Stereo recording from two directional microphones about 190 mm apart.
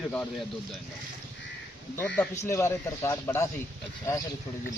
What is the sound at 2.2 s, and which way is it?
Speech, 15° left (ahead or behind).